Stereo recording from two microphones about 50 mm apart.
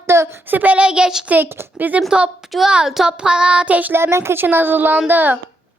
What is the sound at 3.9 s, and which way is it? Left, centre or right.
Speech, right.